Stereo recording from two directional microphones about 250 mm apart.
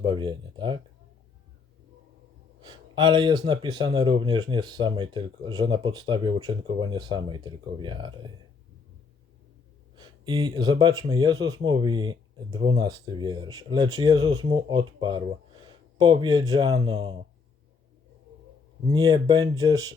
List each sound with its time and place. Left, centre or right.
0.0 s speech: centre
2.6 s speech: centre
9.9 s speech: centre
18.9 s speech: centre